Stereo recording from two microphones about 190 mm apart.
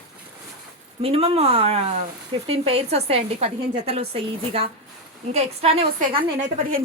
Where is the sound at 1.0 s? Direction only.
30° right (ahead or behind).